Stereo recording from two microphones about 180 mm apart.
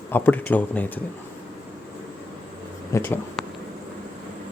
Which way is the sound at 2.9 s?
10° left (ahead or behind).